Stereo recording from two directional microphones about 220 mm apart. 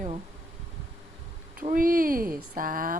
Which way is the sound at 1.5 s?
40° right (ahead or behind).